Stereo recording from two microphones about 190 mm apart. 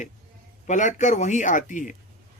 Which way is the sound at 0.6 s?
40° left (ahead or behind).